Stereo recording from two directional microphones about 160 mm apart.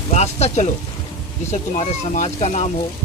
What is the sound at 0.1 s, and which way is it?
Speech, 45° left (ahead or behind).